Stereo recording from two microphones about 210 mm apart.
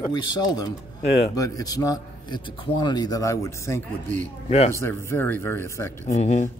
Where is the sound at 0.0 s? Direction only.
20° left (ahead or behind).